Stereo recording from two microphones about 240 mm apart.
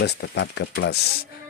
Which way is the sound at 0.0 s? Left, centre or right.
Left.